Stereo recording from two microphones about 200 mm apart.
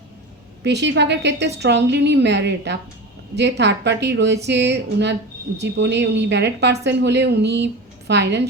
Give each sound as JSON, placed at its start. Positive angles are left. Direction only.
{"t": 0.6, "sound": "a woman's voice", "side_deg": -60}